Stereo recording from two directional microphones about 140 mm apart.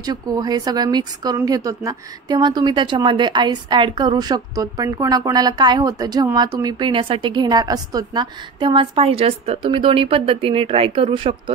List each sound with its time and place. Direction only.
0.0 s a woman's voice: 30° right (ahead or behind)